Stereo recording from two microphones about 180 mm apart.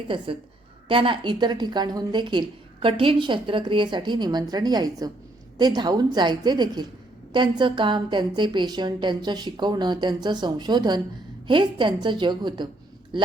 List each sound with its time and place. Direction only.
0.9 s a woman's voice: 30° right (ahead or behind)